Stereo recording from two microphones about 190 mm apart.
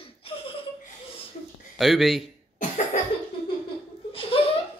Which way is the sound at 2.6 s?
40° left (ahead or behind).